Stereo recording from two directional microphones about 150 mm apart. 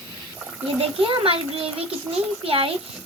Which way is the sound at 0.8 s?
35° right (ahead or behind).